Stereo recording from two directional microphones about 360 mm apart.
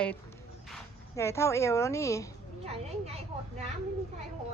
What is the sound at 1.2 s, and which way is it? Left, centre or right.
A woman's voice, centre.